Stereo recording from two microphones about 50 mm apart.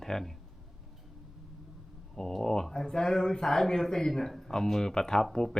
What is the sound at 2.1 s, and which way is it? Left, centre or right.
Speech, centre.